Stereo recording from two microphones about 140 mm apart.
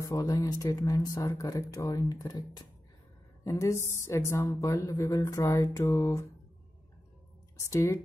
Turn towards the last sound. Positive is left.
turn(degrees=25)  # may be behind; listen again after turning